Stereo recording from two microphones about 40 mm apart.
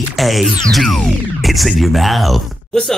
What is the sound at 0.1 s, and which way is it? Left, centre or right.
Speech, centre.